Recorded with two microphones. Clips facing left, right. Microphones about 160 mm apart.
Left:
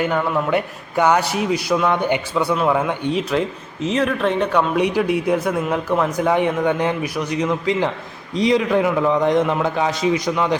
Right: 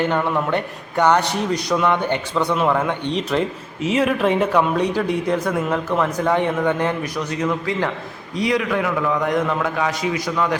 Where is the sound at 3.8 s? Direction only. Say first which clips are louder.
Right 1 dB; 10° right (ahead or behind).